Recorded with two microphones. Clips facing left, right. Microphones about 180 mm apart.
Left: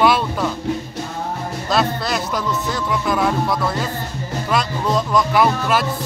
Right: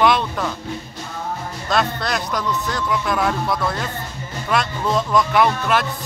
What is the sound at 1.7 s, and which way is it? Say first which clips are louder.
Speech: left 1 dB; 5° left (ahead or behind).